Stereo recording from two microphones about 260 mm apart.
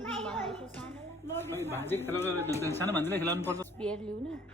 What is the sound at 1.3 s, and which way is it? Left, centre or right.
Speech, centre.